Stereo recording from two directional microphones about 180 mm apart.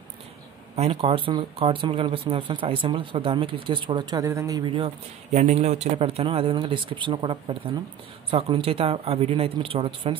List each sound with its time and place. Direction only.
0.7 s speech: 35° right (ahead or behind)
5.3 s speech: 40° right (ahead or behind)